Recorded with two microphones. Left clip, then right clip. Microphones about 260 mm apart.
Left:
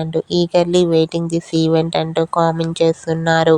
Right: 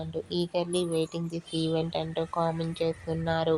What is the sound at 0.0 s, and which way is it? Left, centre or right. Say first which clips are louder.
Speech: left 14 dB; left.